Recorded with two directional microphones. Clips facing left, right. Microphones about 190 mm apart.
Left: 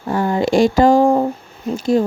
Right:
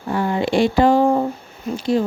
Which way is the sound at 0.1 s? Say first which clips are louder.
Left 3 dB; 40° left (ahead or behind).